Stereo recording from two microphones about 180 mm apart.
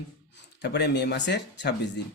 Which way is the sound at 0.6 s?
70° left (ahead or behind).